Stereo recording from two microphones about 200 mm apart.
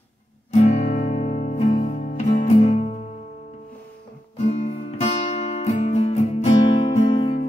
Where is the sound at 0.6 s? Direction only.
35° left (ahead or behind).